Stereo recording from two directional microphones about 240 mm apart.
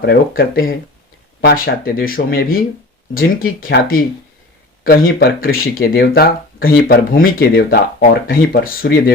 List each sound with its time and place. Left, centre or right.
0.0 s speech: left